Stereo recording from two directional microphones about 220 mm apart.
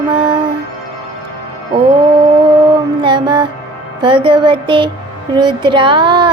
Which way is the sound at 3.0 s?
20° right (ahead or behind).